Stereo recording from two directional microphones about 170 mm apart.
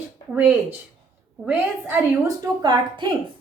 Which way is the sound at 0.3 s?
10° right (ahead or behind).